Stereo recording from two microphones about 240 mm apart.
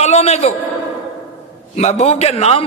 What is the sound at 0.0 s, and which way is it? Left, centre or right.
Speech, left.